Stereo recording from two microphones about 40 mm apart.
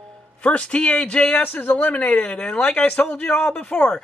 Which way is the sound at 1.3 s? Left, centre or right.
Left.